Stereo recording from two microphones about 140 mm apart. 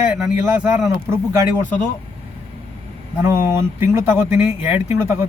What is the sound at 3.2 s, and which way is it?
Speech, 20° right (ahead or behind).